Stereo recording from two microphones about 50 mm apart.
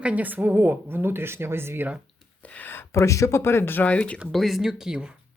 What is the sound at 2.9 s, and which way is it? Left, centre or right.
Speech, left.